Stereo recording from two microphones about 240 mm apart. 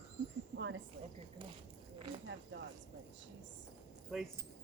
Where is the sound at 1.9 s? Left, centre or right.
Right.